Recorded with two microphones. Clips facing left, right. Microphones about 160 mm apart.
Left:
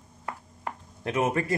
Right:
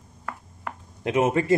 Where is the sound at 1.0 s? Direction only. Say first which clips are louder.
Right 4 dB; 25° right (ahead or behind).